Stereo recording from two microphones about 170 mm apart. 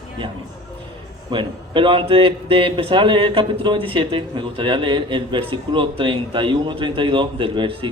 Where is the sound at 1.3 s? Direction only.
30° right (ahead or behind).